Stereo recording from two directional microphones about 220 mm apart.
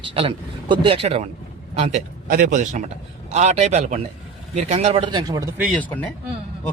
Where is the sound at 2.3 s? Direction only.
35° right (ahead or behind); by 5.4 s 20° right (ahead or behind).